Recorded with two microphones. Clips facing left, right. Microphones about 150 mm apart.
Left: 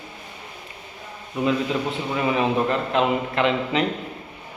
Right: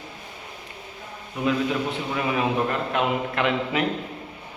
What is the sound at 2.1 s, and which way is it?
A man's voice, centre (ahead or behind).